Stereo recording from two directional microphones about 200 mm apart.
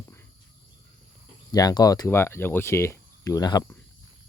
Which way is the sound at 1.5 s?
20° left (ahead or behind).